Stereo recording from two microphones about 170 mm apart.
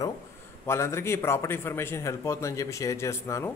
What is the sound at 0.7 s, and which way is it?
Speech, 15° left (ahead or behind).